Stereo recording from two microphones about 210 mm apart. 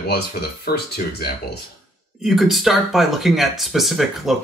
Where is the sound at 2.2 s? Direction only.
Centre (ahead or behind).